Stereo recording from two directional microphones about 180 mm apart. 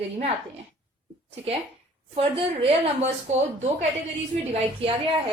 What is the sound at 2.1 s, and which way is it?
Speech, 30° right (ahead or behind).